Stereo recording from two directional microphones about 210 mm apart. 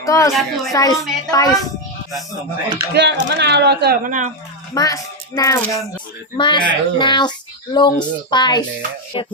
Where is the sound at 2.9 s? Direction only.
55° right (ahead or behind); by 4.3 s 40° right (ahead or behind).